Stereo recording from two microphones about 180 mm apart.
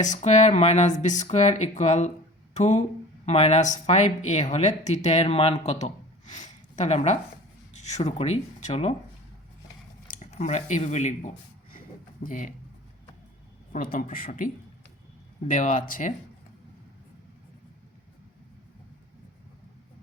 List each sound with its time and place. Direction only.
0.0 s speech: 40° left (ahead or behind)
10.1 s speech: 40° left (ahead or behind)
13.7 s speech: 55° left (ahead or behind)